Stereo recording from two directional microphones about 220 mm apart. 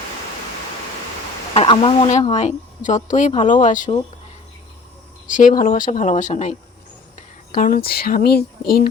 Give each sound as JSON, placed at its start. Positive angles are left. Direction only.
{"t": 1.5, "sound": "speech", "side_deg": 25}
{"t": 5.2, "sound": "speech", "side_deg": 35}
{"t": 7.5, "sound": "speech", "side_deg": 40}